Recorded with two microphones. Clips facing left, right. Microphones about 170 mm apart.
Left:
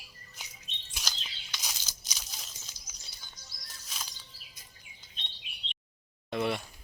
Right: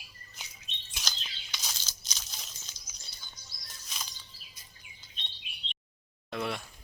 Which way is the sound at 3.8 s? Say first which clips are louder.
Even; 5° left (ahead or behind).